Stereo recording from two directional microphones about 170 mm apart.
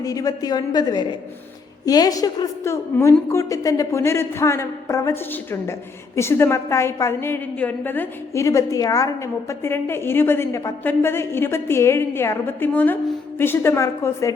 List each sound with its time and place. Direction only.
0.0 s a woman's voice: 20° left (ahead or behind)